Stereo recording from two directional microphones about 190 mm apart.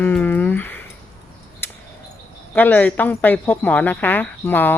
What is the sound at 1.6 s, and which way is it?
Scissors, 10° left (ahead or behind).